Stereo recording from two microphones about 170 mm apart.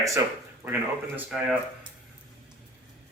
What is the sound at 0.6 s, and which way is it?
Speech, 10° right (ahead or behind).